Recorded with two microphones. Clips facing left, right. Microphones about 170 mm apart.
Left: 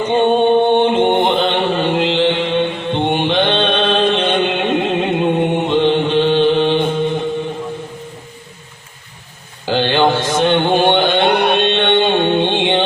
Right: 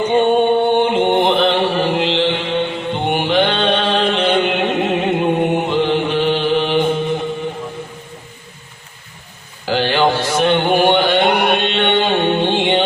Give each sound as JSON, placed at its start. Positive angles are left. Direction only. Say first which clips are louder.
{"t": 0.2, "sound": "chant", "louder": "left 2 dB", "side_deg": 20}
{"t": 6.7, "sound": "music", "louder": "left 1 dB", "side_deg": -15}
{"t": 9.6, "sound": "mantra", "louder": "left 1 dB", "side_deg": 20}
{"t": 11.5, "sound": "music", "louder": "left 2 dB", "side_deg": 20}